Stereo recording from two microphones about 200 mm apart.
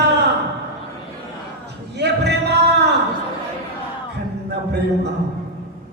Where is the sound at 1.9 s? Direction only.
55° right (ahead or behind).